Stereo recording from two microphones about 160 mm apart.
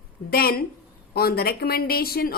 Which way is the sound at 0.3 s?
70° left (ahead or behind).